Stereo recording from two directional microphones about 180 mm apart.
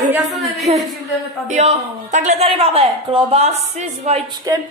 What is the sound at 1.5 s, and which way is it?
A man's voice, 40° right (ahead or behind).